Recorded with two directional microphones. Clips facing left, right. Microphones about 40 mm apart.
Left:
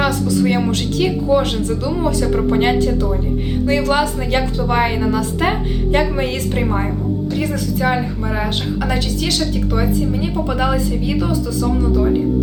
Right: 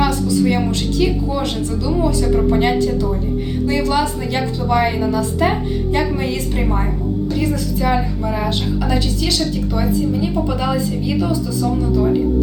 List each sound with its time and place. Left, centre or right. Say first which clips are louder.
0.0 s a woman's voice: even; left
8.8 s a woman's voice: left 1 dB; left
10.5 s a woman's voice: left 1 dB; left